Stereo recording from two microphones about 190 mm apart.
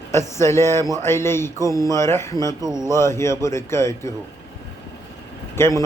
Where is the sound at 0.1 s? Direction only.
15° left (ahead or behind).